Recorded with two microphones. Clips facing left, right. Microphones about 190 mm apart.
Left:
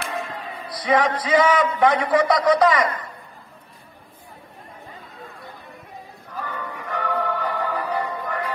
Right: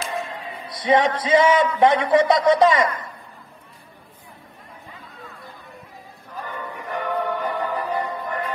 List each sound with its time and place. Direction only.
0.1 s a man's voice: 25° right (ahead or behind)
6.8 s music: 20° right (ahead or behind)